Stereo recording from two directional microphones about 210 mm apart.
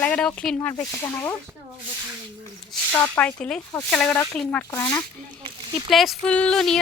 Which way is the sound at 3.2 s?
5° left (ahead or behind).